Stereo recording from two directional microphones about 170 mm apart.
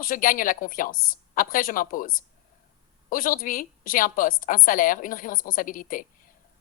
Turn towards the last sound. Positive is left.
turn(degrees=55)  # may be behind; listen again after turning